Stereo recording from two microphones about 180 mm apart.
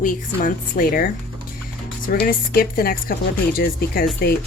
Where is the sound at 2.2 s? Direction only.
55° left (ahead or behind).